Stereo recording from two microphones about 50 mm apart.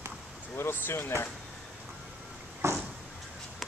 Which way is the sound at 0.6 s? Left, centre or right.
Left.